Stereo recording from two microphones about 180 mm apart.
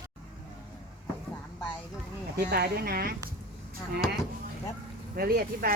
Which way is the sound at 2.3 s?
60° right (ahead or behind).